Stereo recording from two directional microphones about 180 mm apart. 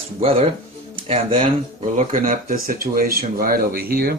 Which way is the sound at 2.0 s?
50° right (ahead or behind).